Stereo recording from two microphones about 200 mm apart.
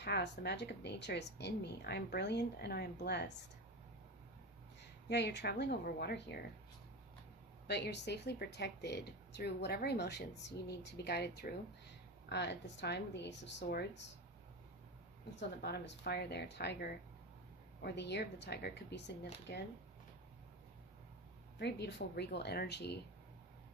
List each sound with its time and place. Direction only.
0.0 s speech: 55° left (ahead or behind)
5.0 s speech: 55° left (ahead or behind)
7.7 s speech: 55° left (ahead or behind)
15.4 s speech: 55° left (ahead or behind)
21.6 s speech: 60° left (ahead or behind)